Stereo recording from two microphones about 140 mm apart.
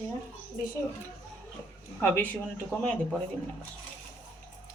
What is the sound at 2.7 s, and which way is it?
Speech, 20° left (ahead or behind).